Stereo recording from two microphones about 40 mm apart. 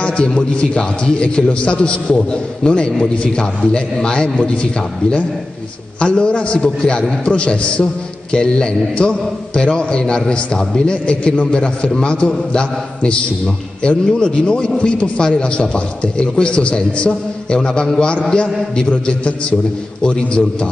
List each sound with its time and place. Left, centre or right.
1.2 s a man's voice: left
5.9 s a man's voice: left